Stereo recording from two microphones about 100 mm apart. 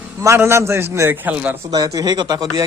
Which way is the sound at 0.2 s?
30° right (ahead or behind).